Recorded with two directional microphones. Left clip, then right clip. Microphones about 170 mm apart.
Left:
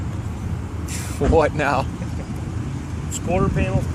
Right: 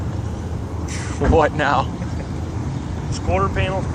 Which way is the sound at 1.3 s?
35° left (ahead or behind).